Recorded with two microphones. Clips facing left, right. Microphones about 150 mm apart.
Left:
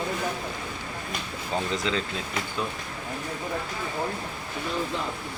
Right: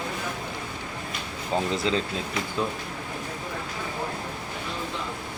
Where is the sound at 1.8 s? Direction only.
30° right (ahead or behind).